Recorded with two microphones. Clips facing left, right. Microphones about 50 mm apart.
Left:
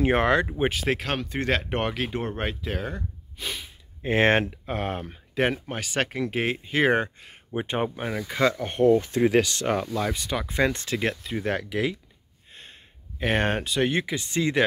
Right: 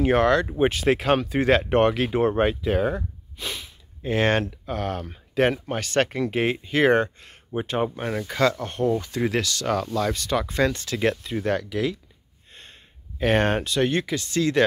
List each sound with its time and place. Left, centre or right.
0.0 s speech: left
0.5 s speech: centre
4.0 s speech: left
5.0 s speech: centre
7.6 s speech: left
7.9 s speech: centre
8.5 s speech: left
9.9 s speech: centre
10.7 s speech: left
11.0 s speech: centre
13.2 s speech: centre
14.2 s speech: centre